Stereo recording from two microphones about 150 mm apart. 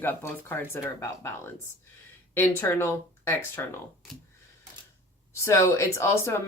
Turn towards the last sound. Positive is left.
turn(degrees=20)  # may be behind; listen again after turning